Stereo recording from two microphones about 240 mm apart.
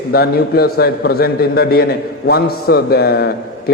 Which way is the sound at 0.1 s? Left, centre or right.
Left.